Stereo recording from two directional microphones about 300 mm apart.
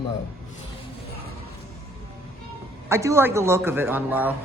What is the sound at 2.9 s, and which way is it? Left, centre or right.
A woman's voice, centre.